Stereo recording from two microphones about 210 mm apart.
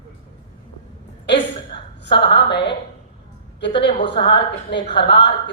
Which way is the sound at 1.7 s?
25° left (ahead or behind).